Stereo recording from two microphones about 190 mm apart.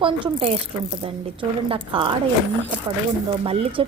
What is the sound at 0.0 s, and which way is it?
A woman's voice, 25° right (ahead or behind).